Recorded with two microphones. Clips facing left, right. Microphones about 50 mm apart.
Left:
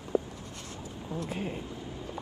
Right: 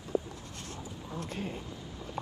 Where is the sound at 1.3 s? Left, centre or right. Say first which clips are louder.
Left 1 dB; centre.